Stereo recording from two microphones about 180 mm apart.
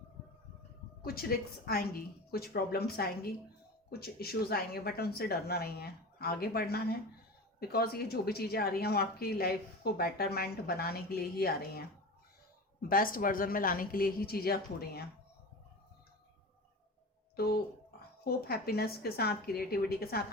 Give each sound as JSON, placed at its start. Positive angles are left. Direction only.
{"t": 1.0, "sound": "speech", "side_deg": 55}
{"t": 12.9, "sound": "a woman's voice", "side_deg": 50}
{"t": 17.3, "sound": "speech", "side_deg": 60}